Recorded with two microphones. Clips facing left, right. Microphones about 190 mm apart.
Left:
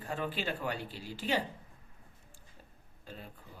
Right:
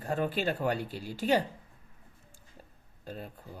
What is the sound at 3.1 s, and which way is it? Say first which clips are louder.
Speech: right 6 dB; 45° right (ahead or behind).